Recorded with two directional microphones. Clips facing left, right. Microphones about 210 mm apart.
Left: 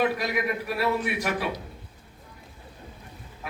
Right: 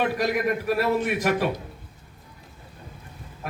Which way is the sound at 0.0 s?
45° right (ahead or behind).